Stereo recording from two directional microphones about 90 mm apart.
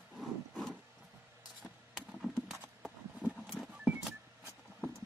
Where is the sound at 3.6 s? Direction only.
5° right (ahead or behind).